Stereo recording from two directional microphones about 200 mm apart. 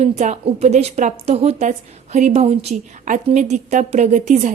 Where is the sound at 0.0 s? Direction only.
35° right (ahead or behind).